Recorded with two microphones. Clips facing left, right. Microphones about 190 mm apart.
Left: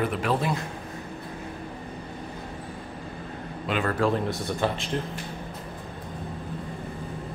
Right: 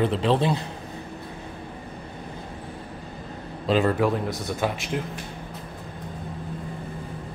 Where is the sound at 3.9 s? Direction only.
10° right (ahead or behind).